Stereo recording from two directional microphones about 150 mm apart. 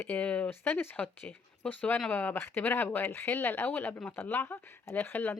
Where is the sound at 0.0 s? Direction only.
10° left (ahead or behind).